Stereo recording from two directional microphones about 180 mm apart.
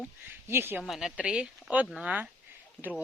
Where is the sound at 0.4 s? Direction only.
15° right (ahead or behind).